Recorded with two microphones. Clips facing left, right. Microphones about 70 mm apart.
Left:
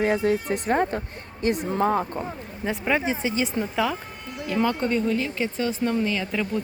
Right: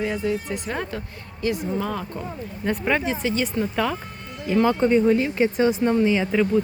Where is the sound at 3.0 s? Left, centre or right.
Centre.